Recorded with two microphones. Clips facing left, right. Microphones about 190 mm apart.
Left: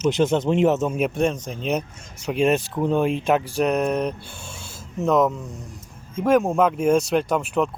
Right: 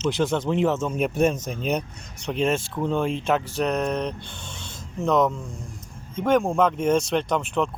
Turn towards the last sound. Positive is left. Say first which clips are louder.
# left 2 dB
turn(degrees=5)  # may be behind; listen again after turning